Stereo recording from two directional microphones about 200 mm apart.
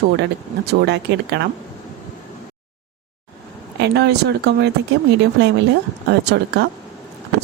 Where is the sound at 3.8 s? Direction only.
60° right (ahead or behind).